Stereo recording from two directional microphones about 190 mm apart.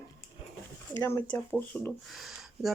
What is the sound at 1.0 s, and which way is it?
Speech, 10° left (ahead or behind).